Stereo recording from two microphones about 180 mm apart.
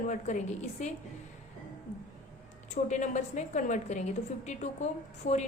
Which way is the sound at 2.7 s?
40° left (ahead or behind).